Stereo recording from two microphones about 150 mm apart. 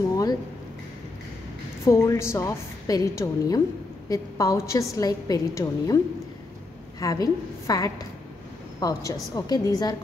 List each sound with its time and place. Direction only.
0.1 s a sound: 25° left (ahead or behind)
1.9 s a woman's voice: 20° left (ahead or behind)
7.0 s a woman's voice: 25° left (ahead or behind)